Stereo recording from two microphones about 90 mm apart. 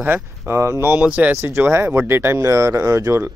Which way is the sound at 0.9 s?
15° right (ahead or behind).